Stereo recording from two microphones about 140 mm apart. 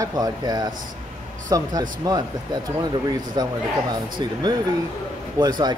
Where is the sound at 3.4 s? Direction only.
30° right (ahead or behind).